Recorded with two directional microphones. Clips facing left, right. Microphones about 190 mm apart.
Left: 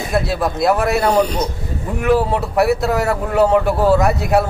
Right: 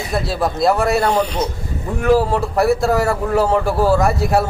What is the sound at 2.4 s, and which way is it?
A man's voice, centre (ahead or behind).